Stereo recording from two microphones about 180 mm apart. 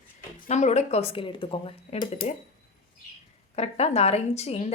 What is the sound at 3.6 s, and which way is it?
A woman's voice, 35° left (ahead or behind).